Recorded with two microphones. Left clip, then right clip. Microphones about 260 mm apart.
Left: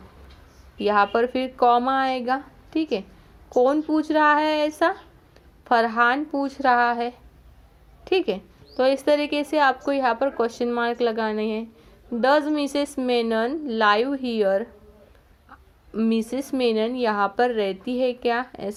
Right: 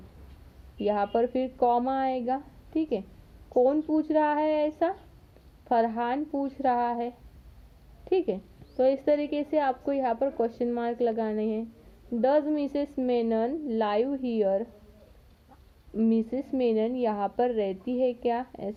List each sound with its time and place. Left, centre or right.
0.8 s a woman's voice: centre
16.0 s a woman's voice: centre